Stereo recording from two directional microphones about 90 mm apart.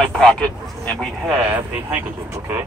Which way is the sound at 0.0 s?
10° left (ahead or behind).